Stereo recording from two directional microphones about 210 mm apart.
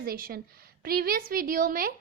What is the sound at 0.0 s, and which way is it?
A woman's voice, 45° right (ahead or behind).